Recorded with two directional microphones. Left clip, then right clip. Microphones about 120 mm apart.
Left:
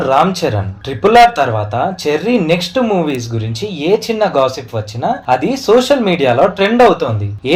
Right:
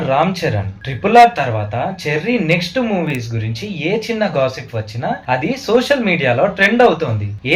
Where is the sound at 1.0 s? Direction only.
40° left (ahead or behind).